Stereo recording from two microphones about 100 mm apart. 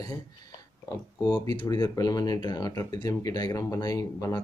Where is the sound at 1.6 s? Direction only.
40° left (ahead or behind).